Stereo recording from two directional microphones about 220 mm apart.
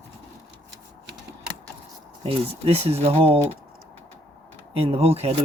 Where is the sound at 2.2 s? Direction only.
25° right (ahead or behind).